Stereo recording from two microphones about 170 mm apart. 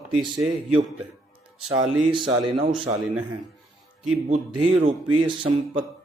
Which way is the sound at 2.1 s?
30° right (ahead or behind).